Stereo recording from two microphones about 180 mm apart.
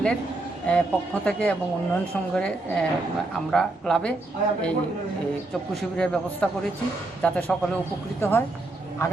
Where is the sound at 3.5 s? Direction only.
5° left (ahead or behind).